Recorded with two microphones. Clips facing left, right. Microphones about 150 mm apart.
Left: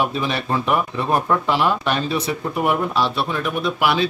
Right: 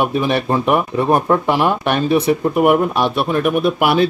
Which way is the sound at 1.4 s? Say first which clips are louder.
Right 3 dB; 55° right (ahead or behind).